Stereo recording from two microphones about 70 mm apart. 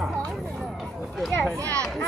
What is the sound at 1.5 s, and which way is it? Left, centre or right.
Speech, right.